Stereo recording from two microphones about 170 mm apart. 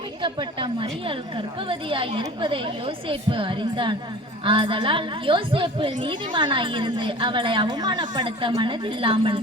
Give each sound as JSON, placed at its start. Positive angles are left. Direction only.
{"t": 0.2, "sound": "a woman's voice", "side_deg": -30}